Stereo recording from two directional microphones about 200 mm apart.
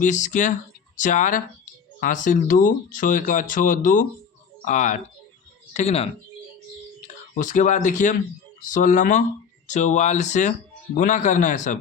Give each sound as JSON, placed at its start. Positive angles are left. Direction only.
{"t": 0.0, "sound": "speech", "side_deg": 40}
{"t": 7.3, "sound": "speech", "side_deg": 40}